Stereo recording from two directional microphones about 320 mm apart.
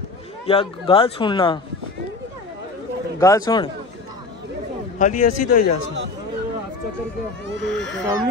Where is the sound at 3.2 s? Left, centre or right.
Centre.